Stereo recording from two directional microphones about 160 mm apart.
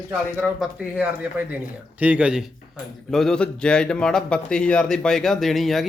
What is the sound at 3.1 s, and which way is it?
A man's voice, 5° left (ahead or behind).